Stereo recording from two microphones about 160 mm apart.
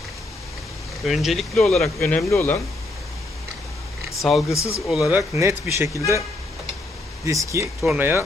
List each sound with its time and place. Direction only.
1.0 s speech: centre (ahead or behind)
4.2 s speech: centre (ahead or behind)
4.5 s speech: 15° left (ahead or behind)
4.9 s speech: 5° right (ahead or behind)
5.3 s speech: 15° right (ahead or behind)
7.3 s speech: 20° right (ahead or behind)